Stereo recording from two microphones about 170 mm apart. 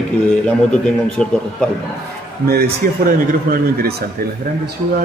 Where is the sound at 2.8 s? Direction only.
60° right (ahead or behind).